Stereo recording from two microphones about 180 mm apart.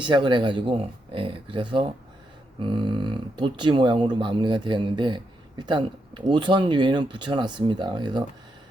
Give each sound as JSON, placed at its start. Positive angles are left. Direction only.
{"t": 0.0, "sound": "speech", "side_deg": -25}